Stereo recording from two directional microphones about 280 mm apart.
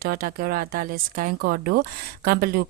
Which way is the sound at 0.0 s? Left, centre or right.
Right.